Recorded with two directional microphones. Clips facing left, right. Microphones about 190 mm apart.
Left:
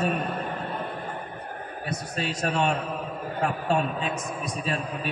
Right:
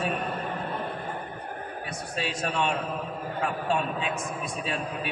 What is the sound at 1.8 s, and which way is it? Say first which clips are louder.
Speech: left 3 dB; 40° left (ahead or behind).